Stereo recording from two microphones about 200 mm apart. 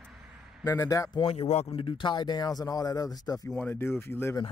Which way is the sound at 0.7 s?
15° left (ahead or behind).